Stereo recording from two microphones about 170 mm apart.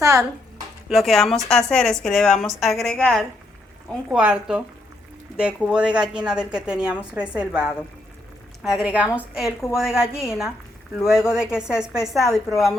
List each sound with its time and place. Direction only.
0.0 s speech: 20° right (ahead or behind)
0.9 s speech: centre (ahead or behind)